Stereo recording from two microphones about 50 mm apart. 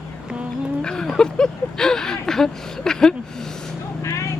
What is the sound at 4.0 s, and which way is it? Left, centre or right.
Vehicle, left.